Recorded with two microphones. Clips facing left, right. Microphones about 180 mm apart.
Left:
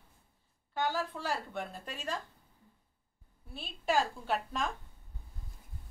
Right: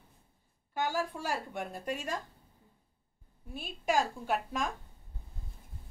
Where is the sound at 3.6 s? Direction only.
45° right (ahead or behind).